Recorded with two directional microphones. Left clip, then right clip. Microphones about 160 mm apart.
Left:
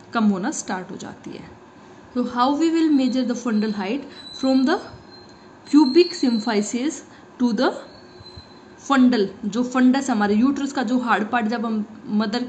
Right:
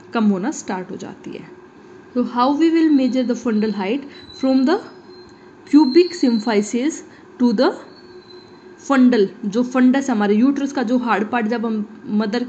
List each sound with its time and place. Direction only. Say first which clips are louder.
0.1 s a woman's voice: right 2 dB; 10° right (ahead or behind)
8.8 s a woman's voice: right 3 dB; 15° right (ahead or behind)